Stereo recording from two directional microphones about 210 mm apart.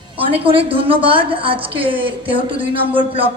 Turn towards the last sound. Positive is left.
turn(degrees=-25)  # may be behind; listen again after turning